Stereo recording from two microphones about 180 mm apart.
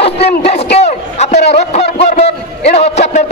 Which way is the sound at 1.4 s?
70° left (ahead or behind).